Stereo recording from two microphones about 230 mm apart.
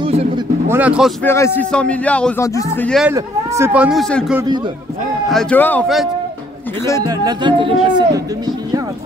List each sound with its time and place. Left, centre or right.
0.7 s speech: centre
1.2 s a man's voice: centre
3.1 s a man's voice: centre
7.0 s speech: centre